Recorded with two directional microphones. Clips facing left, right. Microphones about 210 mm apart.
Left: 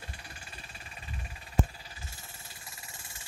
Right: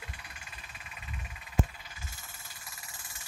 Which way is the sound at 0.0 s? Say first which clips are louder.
Left 1 dB; 30° left (ahead or behind).